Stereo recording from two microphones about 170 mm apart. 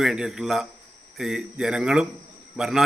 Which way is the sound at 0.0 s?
Centre (ahead or behind).